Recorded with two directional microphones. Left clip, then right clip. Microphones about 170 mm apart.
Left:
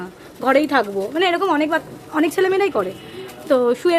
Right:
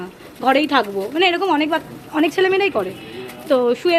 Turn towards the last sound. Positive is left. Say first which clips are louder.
# even
turn(degrees=15)  # may be behind; listen again after turning